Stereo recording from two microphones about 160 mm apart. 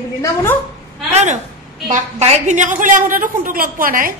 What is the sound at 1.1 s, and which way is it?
A woman's voice, 45° right (ahead or behind).